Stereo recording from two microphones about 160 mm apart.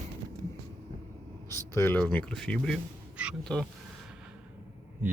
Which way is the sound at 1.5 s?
15° left (ahead or behind).